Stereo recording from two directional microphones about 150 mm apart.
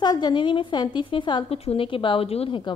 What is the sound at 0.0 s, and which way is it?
A woman's voice, 30° left (ahead or behind).